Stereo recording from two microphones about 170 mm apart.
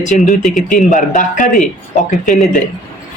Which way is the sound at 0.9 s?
50° left (ahead or behind).